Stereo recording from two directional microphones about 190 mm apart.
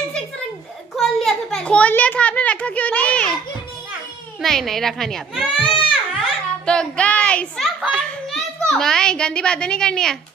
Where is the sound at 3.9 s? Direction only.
Centre (ahead or behind).